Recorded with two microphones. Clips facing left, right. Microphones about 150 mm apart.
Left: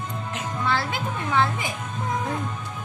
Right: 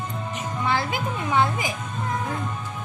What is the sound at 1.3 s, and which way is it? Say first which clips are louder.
Speech: right 1 dB; 15° right (ahead or behind).